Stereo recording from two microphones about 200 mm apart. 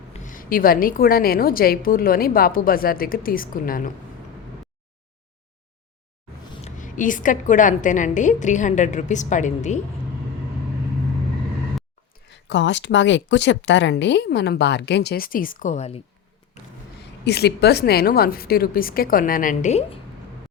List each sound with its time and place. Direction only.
0.1 s a woman's voice: 40° left (ahead or behind)
6.7 s a woman's voice: 40° left (ahead or behind)
12.3 s speech: 60° left (ahead or behind); by 16.0 s 35° left (ahead or behind)
17.2 s a woman's voice: 55° left (ahead or behind); by 20.0 s 35° left (ahead or behind)